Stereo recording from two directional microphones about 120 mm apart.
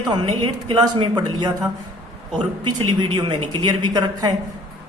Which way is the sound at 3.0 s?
40° right (ahead or behind).